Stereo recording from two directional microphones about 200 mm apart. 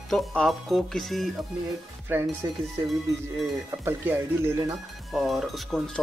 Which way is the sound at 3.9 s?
10° right (ahead or behind).